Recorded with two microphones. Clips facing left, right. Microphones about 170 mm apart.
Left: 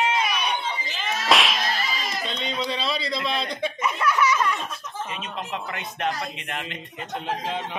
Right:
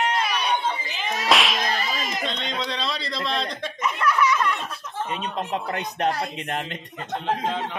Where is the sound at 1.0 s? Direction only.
15° right (ahead or behind).